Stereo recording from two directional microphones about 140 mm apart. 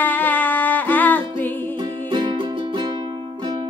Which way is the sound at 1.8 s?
30° right (ahead or behind).